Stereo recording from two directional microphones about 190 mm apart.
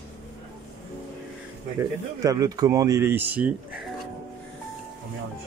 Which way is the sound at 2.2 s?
20° right (ahead or behind).